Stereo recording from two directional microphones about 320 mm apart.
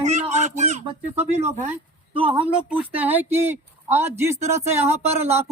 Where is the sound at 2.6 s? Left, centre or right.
Centre.